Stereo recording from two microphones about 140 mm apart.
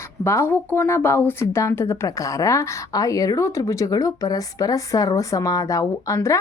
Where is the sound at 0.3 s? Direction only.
15° left (ahead or behind).